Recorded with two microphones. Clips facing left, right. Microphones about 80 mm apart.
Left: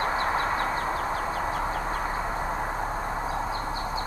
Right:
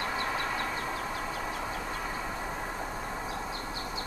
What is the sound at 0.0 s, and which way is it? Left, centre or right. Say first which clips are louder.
Bird: left 6 dB; left.